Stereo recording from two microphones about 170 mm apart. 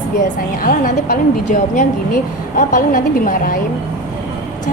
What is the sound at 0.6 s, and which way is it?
A woman's voice, 55° left (ahead or behind).